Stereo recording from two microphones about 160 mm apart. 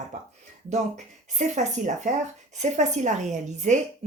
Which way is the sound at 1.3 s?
50° right (ahead or behind).